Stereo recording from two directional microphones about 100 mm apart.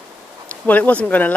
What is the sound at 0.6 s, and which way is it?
Speech, 15° left (ahead or behind).